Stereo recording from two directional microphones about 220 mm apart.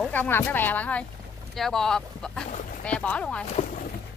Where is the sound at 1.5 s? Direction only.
Centre (ahead or behind).